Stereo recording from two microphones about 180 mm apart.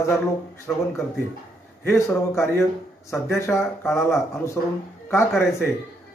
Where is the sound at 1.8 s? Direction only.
15° left (ahead or behind).